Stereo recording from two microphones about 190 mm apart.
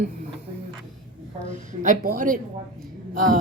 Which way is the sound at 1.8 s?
40° right (ahead or behind).